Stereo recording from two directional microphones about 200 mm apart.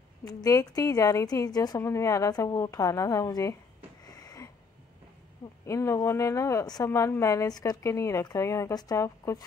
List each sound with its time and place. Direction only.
0.3 s a woman's voice: 15° left (ahead or behind)
4.0 s a sound: 20° left (ahead or behind)
5.7 s a woman's voice: 15° left (ahead or behind)